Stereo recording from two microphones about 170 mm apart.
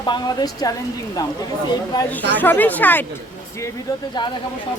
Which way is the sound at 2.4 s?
10° left (ahead or behind).